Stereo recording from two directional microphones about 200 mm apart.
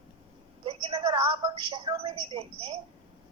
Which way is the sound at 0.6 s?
25° right (ahead or behind).